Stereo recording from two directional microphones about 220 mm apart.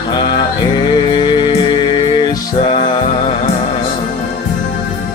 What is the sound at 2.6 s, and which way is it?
Music, 20° left (ahead or behind).